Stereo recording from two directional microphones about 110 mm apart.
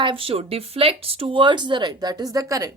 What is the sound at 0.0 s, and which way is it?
Speech, 55° right (ahead or behind).